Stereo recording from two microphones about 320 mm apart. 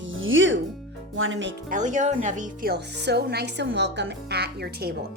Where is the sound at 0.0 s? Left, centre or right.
Right.